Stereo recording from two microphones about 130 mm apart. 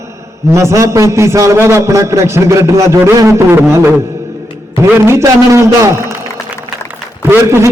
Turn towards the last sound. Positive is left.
turn(degrees=-20)  # may be behind; listen again after turning